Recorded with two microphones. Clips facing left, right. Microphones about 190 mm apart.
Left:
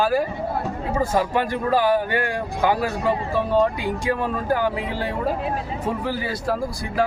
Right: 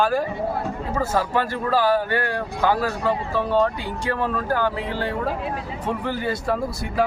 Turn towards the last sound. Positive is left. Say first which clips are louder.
# even
turn(degrees=0)  # may be behind; listen again after turning